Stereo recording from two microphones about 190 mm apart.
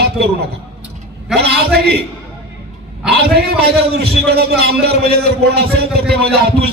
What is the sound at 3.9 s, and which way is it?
A man's voice, 55° right (ahead or behind).